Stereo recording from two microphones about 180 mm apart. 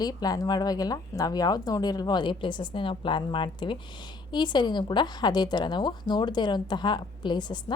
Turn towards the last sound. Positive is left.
turn(degrees=25)  # may be behind; listen again after turning